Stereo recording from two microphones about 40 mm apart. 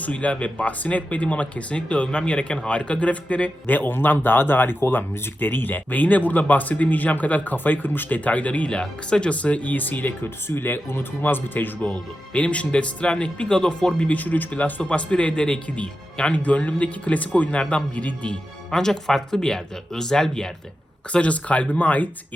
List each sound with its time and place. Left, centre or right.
0.0 s speech: left
3.7 s a man's voice: left
8.8 s speech: left
10.2 s speech: left
11.8 s speech: left
13.5 s speech: centre
14.1 s speech: left
17.6 s speech: left
18.7 s speech: centre
21.1 s speech: left